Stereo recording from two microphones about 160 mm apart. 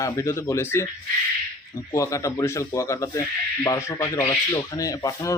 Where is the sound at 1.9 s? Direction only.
20° left (ahead or behind).